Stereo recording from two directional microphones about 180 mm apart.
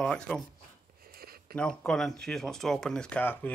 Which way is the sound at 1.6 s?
5° left (ahead or behind).